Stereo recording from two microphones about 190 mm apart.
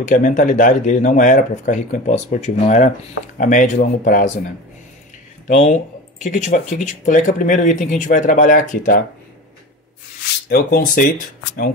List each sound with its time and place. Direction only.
0.1 s speech: 45° left (ahead or behind)
5.5 s speech: 40° left (ahead or behind)
10.5 s speech: 50° left (ahead or behind)